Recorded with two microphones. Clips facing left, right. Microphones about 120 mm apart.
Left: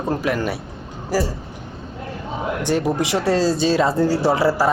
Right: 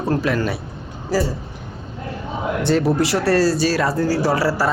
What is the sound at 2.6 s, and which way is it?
Speech, 15° left (ahead or behind).